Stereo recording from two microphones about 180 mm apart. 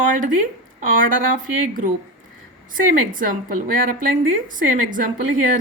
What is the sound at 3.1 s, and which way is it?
Speech, 50° right (ahead or behind).